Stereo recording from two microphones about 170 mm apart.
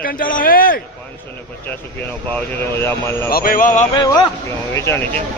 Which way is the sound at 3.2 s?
60° left (ahead or behind).